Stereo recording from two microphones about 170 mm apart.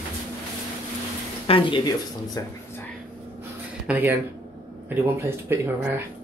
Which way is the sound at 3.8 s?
10° right (ahead or behind).